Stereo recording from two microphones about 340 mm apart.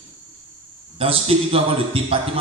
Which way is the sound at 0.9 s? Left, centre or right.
Centre.